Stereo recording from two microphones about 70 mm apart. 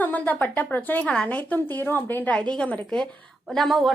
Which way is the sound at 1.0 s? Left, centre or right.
Centre.